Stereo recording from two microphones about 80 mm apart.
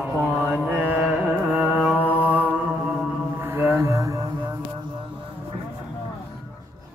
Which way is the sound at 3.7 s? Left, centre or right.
Right.